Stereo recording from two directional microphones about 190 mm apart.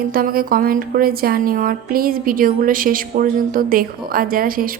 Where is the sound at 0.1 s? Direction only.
50° right (ahead or behind).